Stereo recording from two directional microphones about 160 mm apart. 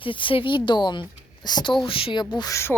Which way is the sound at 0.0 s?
30° left (ahead or behind).